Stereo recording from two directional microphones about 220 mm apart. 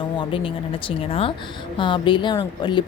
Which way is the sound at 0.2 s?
25° left (ahead or behind).